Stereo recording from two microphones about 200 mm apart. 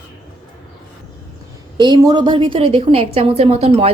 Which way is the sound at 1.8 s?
20° right (ahead or behind).